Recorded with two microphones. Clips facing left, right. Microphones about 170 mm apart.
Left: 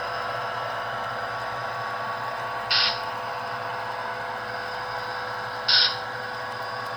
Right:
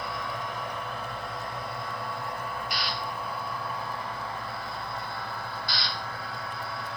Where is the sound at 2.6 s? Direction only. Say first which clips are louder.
Left 3 dB; 80° left.